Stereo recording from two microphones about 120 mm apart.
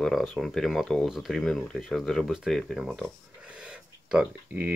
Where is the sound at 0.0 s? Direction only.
Centre (ahead or behind).